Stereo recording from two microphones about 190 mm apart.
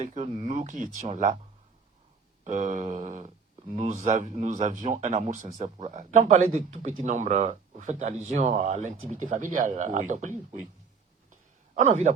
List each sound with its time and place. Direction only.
0.0 s a man's voice: 40° right (ahead or behind)
2.4 s a man's voice: 40° right (ahead or behind)
11.7 s a man's voice: 40° right (ahead or behind)